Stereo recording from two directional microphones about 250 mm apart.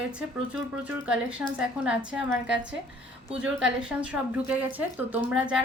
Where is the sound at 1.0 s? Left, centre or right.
Centre.